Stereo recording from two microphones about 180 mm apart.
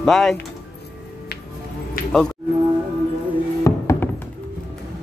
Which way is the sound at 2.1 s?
5° left (ahead or behind).